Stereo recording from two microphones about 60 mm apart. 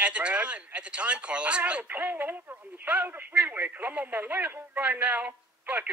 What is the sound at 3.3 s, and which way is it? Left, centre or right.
Speech, right.